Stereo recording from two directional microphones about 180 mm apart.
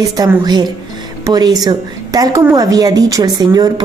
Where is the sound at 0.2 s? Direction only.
20° right (ahead or behind).